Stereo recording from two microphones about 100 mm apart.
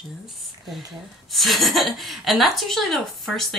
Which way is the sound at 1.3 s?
Centre (ahead or behind).